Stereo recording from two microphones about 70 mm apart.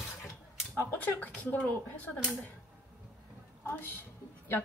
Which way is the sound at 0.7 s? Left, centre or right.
Left.